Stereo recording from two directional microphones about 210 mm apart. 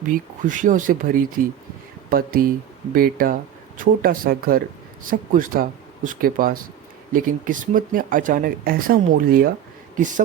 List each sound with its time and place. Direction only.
0.4 s speech: 40° right (ahead or behind)